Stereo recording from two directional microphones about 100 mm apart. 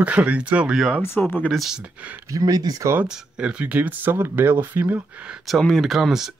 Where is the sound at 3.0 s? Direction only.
10° right (ahead or behind).